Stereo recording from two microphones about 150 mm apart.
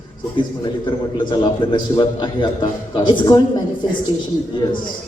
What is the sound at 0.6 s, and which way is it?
A man's voice, 30° left (ahead or behind).